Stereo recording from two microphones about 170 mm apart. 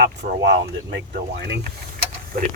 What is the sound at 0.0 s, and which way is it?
Speech, 90° right.